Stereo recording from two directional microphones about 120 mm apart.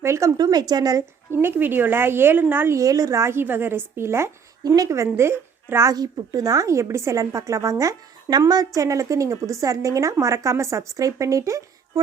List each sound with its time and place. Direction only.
0.0 s a woman's voice: 20° right (ahead or behind)
0.3 s a woman's voice: 35° right (ahead or behind)
1.3 s a woman's voice: 20° right (ahead or behind)